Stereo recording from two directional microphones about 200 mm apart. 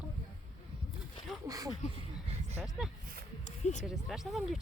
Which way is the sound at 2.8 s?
5° right (ahead or behind).